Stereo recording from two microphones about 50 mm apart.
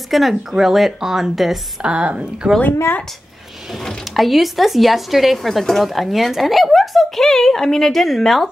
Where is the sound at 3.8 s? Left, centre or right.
Centre.